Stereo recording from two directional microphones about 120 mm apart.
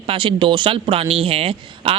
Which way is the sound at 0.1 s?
45° right (ahead or behind).